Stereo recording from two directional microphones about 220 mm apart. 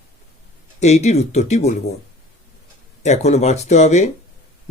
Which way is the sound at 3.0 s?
30° left (ahead or behind).